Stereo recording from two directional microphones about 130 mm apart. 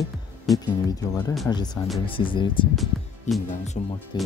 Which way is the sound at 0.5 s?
30° left (ahead or behind).